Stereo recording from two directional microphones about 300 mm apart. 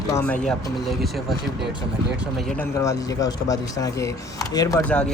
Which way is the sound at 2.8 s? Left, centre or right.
Centre.